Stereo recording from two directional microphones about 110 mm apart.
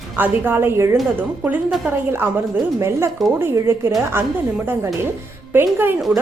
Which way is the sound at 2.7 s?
25° right (ahead or behind).